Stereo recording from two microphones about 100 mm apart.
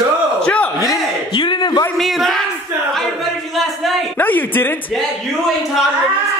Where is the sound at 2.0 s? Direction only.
Centre (ahead or behind).